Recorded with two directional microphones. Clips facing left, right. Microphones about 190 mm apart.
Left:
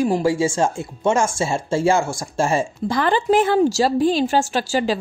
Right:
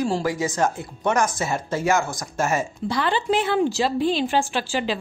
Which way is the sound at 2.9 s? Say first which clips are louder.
Left 5 dB; 45° left (ahead or behind).